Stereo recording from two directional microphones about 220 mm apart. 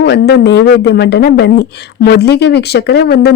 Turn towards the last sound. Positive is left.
turn(degrees=45)  # may be behind; listen again after turning